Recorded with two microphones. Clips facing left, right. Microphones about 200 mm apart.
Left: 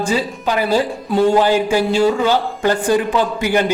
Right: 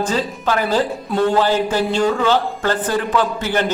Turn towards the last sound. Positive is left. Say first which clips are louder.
# left 3 dB
turn(degrees=10)  # may be behind; listen again after turning